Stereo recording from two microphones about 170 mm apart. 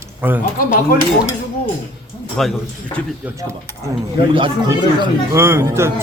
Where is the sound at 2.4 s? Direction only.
Centre (ahead or behind).